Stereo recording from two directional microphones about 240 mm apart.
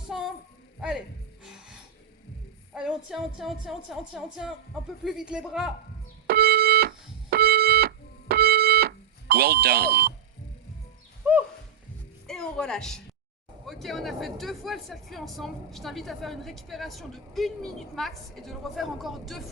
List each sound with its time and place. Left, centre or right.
0.8 s speech: centre
2.7 s speech: centre
6.2 s keyboard: right
9.3 s speech: right
11.2 s a sound: centre
12.3 s speech: centre